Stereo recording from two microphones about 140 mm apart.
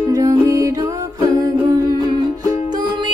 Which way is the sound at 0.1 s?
25° right (ahead or behind).